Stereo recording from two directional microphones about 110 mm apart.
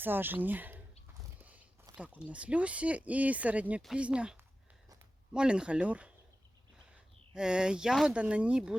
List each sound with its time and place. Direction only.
0.0 s speech: 20° right (ahead or behind)
2.0 s speech: 10° right (ahead or behind)
7.3 s speech: 5° right (ahead or behind)